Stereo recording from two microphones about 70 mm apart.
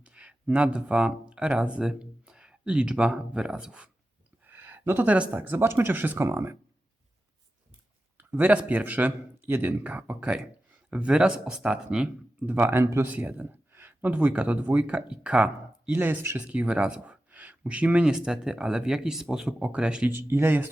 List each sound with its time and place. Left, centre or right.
0.0 s speech: centre
4.4 s speech: right
8.2 s a man's voice: right
12.8 s speech: right
13.1 s a sound: right
14.1 s speech: centre
15.9 s a man's voice: right
20.1 s speech: right